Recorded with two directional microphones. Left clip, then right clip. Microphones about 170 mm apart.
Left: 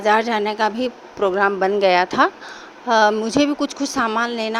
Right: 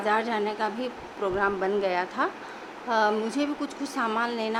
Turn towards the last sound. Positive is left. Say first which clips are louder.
# left 6 dB
turn(degrees=40)  # may be behind; listen again after turning